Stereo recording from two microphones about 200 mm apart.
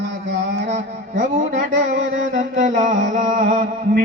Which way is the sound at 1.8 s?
65° right (ahead or behind).